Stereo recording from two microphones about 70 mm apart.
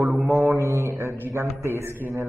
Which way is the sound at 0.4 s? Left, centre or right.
Right.